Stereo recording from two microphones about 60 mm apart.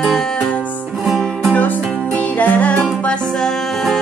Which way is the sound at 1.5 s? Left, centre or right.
Left.